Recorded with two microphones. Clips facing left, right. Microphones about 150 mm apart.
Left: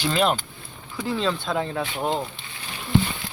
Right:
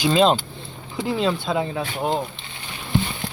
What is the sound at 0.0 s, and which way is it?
Speech, 20° right (ahead or behind).